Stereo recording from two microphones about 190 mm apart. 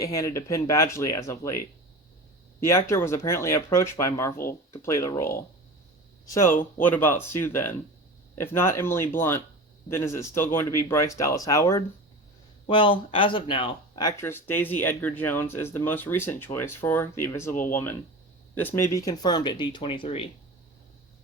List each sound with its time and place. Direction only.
0.0 s speech: 15° left (ahead or behind)
17.5 s speech: 45° left (ahead or behind)
18.5 s speech: 10° left (ahead or behind); by 20.2 s 30° left (ahead or behind)